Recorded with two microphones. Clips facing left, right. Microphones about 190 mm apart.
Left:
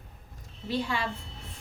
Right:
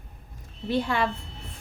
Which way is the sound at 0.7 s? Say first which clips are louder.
Right 5 dB; 55° right (ahead or behind).